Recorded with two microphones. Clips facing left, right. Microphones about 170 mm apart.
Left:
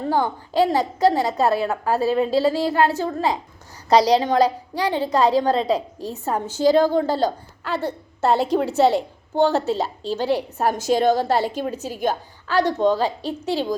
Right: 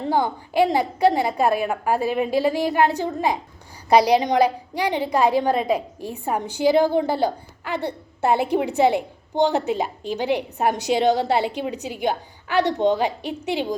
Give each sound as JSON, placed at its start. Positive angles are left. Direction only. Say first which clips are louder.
{"t": 0.0, "sound": "a woman's voice", "louder": "even", "side_deg": -15}